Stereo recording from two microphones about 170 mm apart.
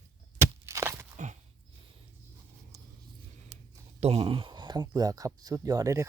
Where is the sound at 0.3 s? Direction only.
15° right (ahead or behind).